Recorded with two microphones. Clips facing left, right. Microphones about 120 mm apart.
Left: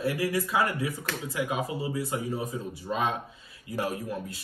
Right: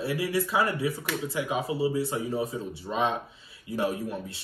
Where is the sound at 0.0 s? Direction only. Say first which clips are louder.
Even; 25° right (ahead or behind).